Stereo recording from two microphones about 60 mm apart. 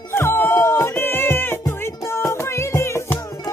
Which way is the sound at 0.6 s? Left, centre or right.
Left.